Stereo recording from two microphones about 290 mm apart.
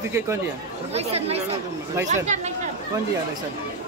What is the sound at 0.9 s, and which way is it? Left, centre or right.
A child's voice, right.